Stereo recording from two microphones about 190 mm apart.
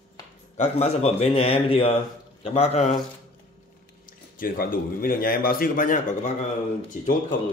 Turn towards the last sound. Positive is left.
turn(degrees=45)  # may be behind; listen again after turning